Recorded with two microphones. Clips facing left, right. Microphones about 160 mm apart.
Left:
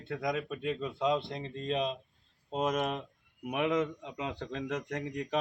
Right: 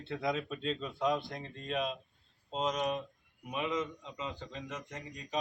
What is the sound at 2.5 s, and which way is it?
Speech, 50° left (ahead or behind).